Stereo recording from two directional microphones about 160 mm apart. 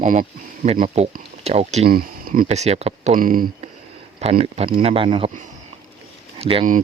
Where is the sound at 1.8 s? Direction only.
65° right (ahead or behind); by 3.1 s 40° right (ahead or behind).